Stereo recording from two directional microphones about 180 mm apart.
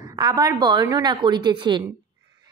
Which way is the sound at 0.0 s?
20° right (ahead or behind).